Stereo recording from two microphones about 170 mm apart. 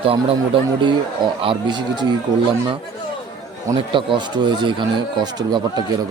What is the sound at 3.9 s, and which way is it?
Speech, 30° right (ahead or behind).